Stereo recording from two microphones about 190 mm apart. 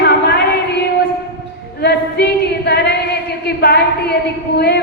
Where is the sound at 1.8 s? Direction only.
60° left (ahead or behind).